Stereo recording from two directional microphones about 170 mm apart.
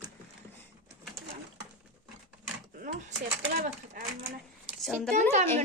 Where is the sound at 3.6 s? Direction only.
60° right (ahead or behind).